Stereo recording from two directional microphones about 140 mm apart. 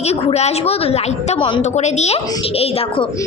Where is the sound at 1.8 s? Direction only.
55° left (ahead or behind).